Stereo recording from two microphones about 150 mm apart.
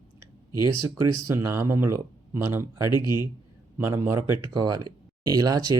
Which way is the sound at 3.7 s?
15° right (ahead or behind).